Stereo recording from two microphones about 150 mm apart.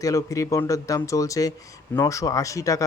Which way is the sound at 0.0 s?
20° left (ahead or behind).